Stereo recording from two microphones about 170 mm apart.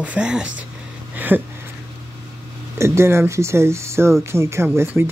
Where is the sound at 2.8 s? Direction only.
15° right (ahead or behind).